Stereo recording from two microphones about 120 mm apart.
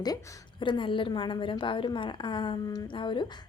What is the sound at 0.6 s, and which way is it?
A woman's voice, 45° left (ahead or behind).